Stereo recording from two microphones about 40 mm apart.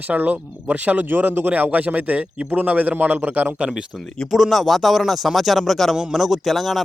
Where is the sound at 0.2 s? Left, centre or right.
Right.